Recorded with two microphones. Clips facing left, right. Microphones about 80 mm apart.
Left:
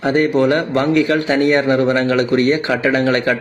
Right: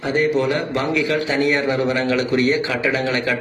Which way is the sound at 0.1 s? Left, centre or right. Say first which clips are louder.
Left 4 dB; left.